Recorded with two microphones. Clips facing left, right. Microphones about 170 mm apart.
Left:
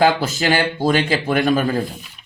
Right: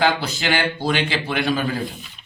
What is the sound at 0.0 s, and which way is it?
Speech, 45° left (ahead or behind).